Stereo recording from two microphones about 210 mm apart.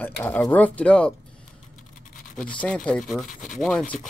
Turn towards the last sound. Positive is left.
turn(degrees=5)  # may be behind; listen again after turning